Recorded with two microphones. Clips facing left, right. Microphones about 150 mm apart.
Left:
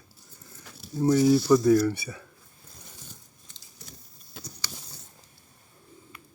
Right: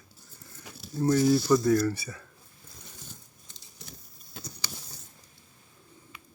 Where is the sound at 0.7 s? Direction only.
15° right (ahead or behind).